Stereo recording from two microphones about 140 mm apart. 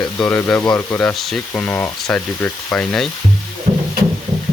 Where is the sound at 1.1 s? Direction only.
Centre (ahead or behind).